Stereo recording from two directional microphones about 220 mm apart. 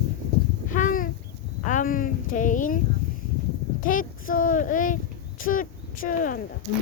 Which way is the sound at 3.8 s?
40° left (ahead or behind).